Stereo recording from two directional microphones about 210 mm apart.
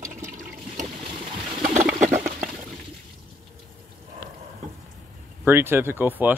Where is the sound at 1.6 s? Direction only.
35° right (ahead or behind).